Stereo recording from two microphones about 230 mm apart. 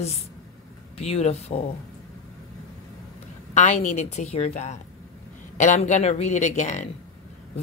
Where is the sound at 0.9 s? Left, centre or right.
Left.